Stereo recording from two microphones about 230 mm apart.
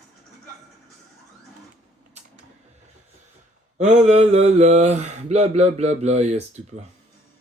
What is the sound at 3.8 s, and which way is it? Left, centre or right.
Mantra, right.